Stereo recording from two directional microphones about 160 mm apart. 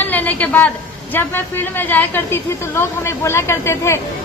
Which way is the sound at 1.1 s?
15° left (ahead or behind).